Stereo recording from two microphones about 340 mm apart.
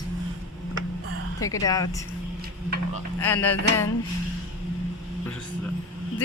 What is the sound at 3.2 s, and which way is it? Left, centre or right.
Speech, centre.